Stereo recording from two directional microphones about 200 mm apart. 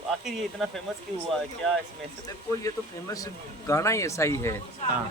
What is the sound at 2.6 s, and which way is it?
Speech, 15° left (ahead or behind).